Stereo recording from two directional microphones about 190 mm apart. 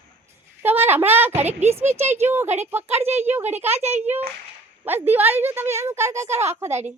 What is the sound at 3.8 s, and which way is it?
Speech, 35° right (ahead or behind).